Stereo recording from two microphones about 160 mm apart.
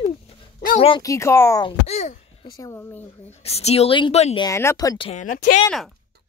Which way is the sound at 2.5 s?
15° left (ahead or behind).